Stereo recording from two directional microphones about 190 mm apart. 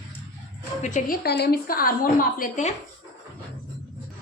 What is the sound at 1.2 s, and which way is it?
A woman's voice, 55° left (ahead or behind).